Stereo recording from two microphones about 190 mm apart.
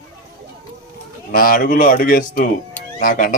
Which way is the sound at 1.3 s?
50° left (ahead or behind).